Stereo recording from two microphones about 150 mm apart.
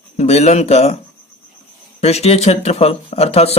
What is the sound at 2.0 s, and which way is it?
Speech, 45° left (ahead or behind).